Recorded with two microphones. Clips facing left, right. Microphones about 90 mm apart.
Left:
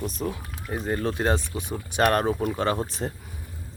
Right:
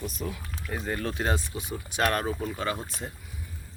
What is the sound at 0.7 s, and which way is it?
Speech, 20° left (ahead or behind).